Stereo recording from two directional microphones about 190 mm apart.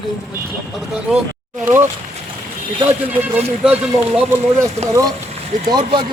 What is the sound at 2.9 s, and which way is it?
Speech, 10° right (ahead or behind).